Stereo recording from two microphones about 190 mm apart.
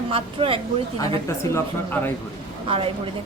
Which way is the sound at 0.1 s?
30° right (ahead or behind).